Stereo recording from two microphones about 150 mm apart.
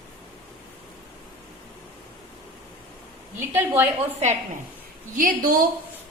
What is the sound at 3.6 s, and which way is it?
Speech, 15° right (ahead or behind).